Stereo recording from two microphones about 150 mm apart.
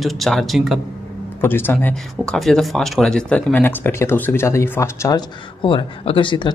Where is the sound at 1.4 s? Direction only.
15° left (ahead or behind).